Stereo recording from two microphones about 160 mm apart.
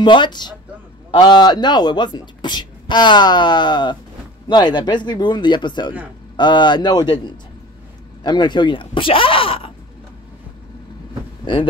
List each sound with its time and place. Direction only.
0.0 s speech: 30° left (ahead or behind)